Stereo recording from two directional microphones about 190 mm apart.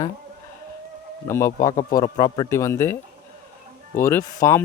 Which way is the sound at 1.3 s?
15° left (ahead or behind).